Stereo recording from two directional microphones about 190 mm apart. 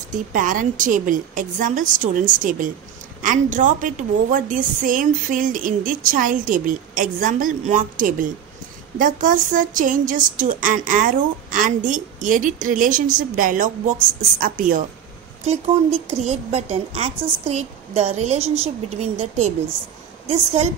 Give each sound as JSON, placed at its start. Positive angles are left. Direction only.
{"t": 0.1, "sound": "a woman's voice", "side_deg": -45}
{"t": 16.1, "sound": "a woman's voice", "side_deg": -35}